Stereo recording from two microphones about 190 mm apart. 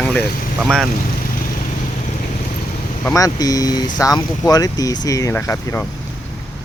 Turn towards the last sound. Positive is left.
turn(degrees=15)  # may be behind; listen again after turning